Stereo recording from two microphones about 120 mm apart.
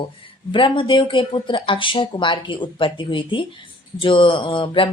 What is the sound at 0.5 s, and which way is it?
Speech, 45° left (ahead or behind).